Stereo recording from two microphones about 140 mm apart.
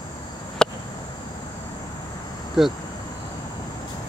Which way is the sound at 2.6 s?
Centre (ahead or behind).